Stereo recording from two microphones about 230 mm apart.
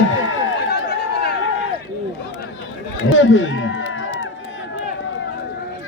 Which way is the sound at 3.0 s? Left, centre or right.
Left.